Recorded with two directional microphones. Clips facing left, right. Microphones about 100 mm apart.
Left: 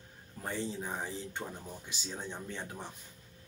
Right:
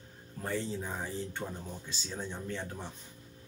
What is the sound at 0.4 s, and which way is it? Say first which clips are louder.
Speech: right 2 dB; 15° left (ahead or behind).